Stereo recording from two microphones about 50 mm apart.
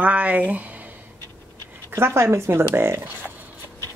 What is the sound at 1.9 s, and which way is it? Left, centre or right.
Speech, right.